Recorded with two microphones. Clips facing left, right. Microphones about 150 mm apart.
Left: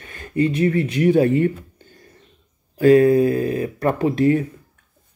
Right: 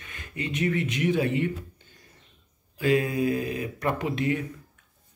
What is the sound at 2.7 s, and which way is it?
Speech, 45° left (ahead or behind).